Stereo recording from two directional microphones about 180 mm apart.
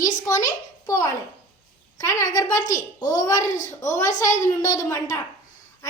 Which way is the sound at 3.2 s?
20° left (ahead or behind).